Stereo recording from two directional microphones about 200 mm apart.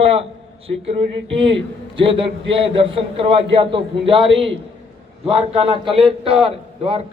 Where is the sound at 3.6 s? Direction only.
25° right (ahead or behind).